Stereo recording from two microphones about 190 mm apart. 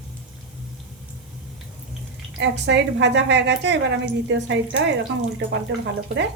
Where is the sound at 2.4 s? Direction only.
65° right (ahead or behind).